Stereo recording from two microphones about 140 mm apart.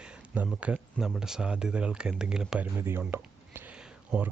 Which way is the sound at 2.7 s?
15° right (ahead or behind).